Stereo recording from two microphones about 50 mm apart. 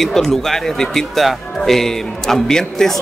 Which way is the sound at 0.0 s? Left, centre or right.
Centre.